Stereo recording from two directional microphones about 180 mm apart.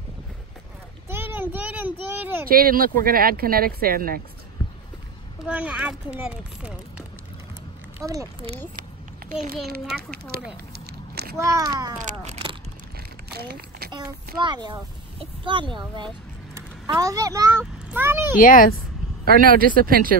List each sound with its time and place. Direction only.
1.0 s a sound: 10° right (ahead or behind)
2.4 s speech: 55° right (ahead or behind)
5.5 s speech: 5° right (ahead or behind)
8.0 s a child's voice: 20° right (ahead or behind)
9.9 s speech: centre (ahead or behind)
10.9 s a sound: 60° right (ahead or behind)
11.3 s a child's voice: 20° right (ahead or behind)
13.3 s a sound: 60° right (ahead or behind)
13.9 s a child's voice: 25° right (ahead or behind)
18.4 s speech: 50° left (ahead or behind)
19.2 s speech: 55° right (ahead or behind)